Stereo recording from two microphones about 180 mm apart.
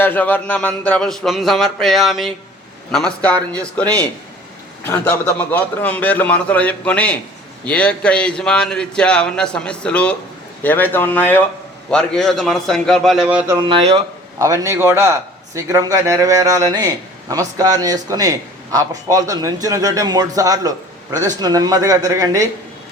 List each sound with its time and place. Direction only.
0.0 s a man's voice: 10° left (ahead or behind); by 13.6 s 5° right (ahead or behind)
13.6 s a man's voice: 25° right (ahead or behind)
14.3 s a man's voice: 15° right (ahead or behind)